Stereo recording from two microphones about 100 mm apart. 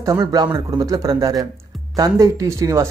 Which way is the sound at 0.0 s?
35° right (ahead or behind).